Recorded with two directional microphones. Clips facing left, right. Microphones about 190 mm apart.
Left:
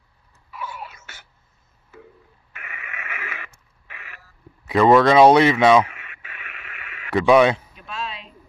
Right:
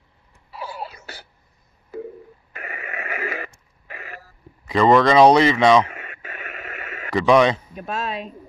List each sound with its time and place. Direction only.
0.5 s wail: 35° right (ahead or behind)
1.9 s telephone dialing: 35° right (ahead or behind)
2.5 s radio: 35° right (ahead or behind)
3.8 s throat clearing: 40° right (ahead or behind)
4.6 s speech: 5° left (ahead or behind)
5.9 s radio: 40° right (ahead or behind)
7.1 s speech: 5° left (ahead or behind)
7.7 s speech: 50° right (ahead or behind)